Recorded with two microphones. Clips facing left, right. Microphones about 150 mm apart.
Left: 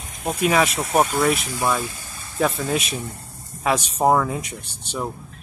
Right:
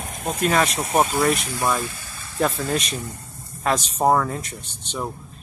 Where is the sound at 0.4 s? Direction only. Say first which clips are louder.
Left 1 dB; 10° left (ahead or behind).